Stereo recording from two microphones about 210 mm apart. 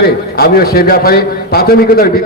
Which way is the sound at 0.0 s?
45° left (ahead or behind).